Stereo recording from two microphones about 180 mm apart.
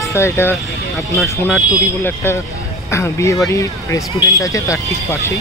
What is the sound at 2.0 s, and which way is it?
Speech, 15° left (ahead or behind).